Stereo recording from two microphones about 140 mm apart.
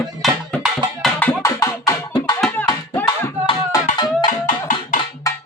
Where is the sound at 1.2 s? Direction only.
20° left (ahead or behind).